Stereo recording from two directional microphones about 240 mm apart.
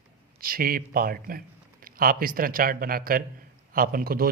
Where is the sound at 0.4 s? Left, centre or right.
Right.